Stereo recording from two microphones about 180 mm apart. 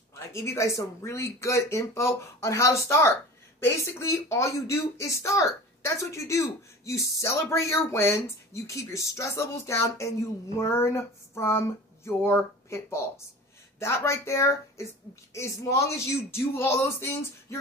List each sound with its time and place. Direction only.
0.1 s speech: 15° left (ahead or behind)